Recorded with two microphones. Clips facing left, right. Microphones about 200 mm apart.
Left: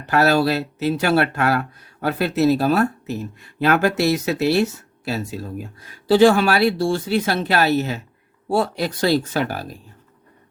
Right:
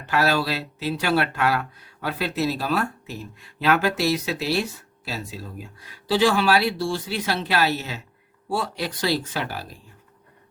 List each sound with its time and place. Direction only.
0.0 s speech: 45° left (ahead or behind)